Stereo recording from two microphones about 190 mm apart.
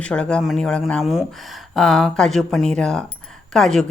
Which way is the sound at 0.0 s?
5° left (ahead or behind).